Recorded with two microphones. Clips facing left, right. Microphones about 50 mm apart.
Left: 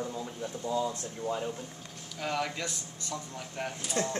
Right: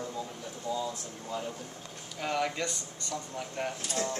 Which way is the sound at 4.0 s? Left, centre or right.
Left.